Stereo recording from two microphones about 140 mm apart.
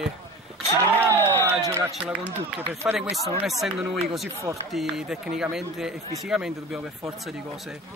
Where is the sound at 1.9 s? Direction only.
5° right (ahead or behind).